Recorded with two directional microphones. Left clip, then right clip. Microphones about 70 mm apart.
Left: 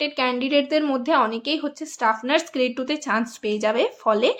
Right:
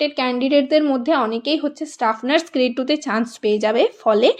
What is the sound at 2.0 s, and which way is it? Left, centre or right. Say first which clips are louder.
Speech: right 2 dB; right.